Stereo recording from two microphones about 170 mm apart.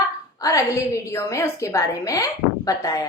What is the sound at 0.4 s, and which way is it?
A woman's voice, 20° left (ahead or behind).